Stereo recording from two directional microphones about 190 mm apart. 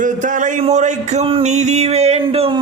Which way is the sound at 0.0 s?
40° right (ahead or behind).